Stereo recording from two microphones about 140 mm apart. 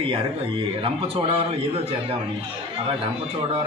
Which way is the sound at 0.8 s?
45° right (ahead or behind).